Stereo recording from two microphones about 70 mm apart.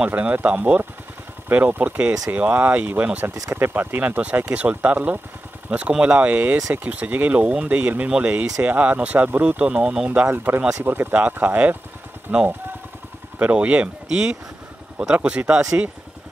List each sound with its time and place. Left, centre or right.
0.0 s speech: right
3.3 s speech: right
3.6 s speech: right; by 10.2 s centre
10.3 s speech: right